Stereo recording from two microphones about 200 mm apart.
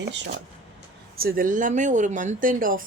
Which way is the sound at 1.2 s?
45° right (ahead or behind).